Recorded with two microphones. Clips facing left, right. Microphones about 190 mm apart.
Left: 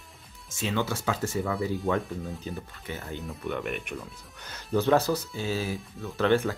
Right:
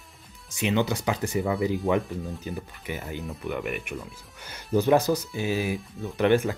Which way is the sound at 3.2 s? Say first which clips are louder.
Even; centre (ahead or behind).